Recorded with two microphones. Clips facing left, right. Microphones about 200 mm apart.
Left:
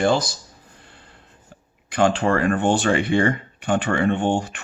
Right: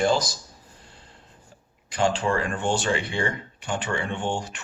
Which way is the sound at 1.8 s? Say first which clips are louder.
Left 5 dB; 60° left (ahead or behind).